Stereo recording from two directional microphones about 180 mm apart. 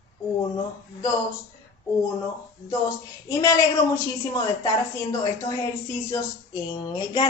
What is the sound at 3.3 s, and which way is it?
Speech, 20° left (ahead or behind).